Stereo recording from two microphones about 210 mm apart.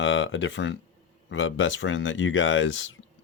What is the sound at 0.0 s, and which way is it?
Speech, 65° left (ahead or behind).